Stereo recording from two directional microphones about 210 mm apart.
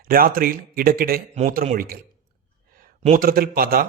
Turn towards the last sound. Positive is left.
turn(degrees=-45)  # may be behind; listen again after turning